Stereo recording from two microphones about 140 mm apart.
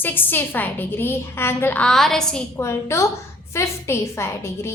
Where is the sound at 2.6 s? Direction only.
20° left (ahead or behind).